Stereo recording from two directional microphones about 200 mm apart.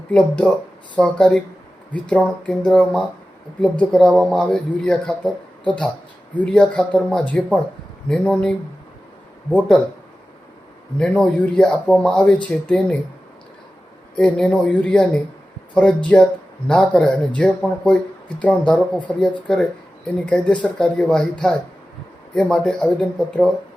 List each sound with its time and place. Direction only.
0.1 s speech: 5° left (ahead or behind)
11.0 s speech: 5° left (ahead or behind)
14.2 s speech: 5° left (ahead or behind)